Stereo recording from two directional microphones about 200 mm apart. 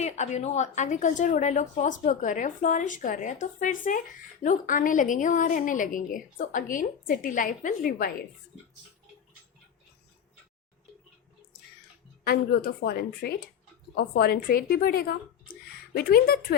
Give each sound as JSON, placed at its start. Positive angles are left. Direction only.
{"t": 0.0, "sound": "a woman's voice", "side_deg": 35}
{"t": 12.2, "sound": "a woman's voice", "side_deg": 50}